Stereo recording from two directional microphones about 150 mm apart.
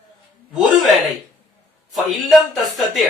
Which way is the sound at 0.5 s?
Centre (ahead or behind).